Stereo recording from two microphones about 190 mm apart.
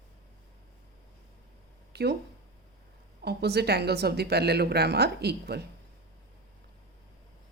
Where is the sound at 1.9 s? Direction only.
60° right (ahead or behind).